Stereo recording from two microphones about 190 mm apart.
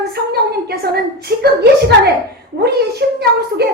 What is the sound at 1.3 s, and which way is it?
Speech, 60° right (ahead or behind).